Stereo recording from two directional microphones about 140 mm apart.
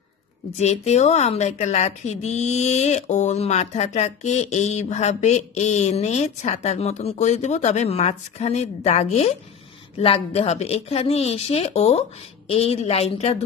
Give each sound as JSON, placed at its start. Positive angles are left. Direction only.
{"t": 0.6, "sound": "a woman's voice", "side_deg": 50}